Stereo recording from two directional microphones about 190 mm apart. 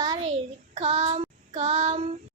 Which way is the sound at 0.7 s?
35° right (ahead or behind).